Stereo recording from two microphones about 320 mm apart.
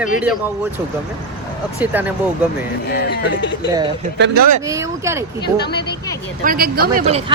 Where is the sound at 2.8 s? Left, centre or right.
Left.